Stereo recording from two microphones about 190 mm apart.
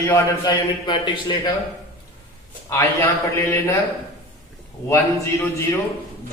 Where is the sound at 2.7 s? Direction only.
15° left (ahead or behind).